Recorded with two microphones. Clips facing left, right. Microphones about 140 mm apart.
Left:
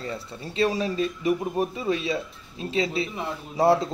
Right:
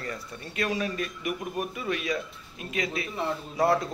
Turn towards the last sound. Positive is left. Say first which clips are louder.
# left 4 dB
turn(degrees=25)  # may be behind; listen again after turning